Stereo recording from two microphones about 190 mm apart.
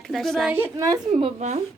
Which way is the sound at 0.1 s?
Centre (ahead or behind).